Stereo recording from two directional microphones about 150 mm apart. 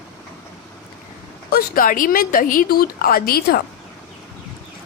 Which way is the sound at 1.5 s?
70° left (ahead or behind).